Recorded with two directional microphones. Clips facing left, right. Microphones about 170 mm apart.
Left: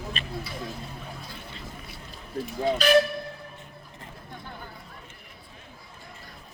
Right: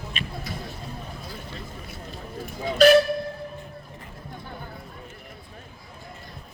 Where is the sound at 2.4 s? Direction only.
45° right (ahead or behind).